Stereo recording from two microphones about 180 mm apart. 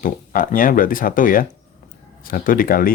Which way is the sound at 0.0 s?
50° left (ahead or behind).